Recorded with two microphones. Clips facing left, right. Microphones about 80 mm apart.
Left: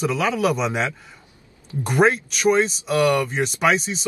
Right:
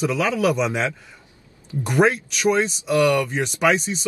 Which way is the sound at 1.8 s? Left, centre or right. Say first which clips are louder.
Even; left.